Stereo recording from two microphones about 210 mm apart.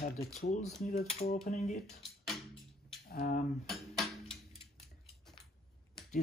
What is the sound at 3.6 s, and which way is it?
Music, centre (ahead or behind).